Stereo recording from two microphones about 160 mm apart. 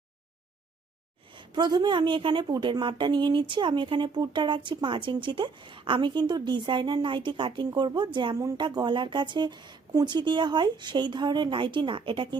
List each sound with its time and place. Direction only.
1.3 s a woman's voice: 30° right (ahead or behind)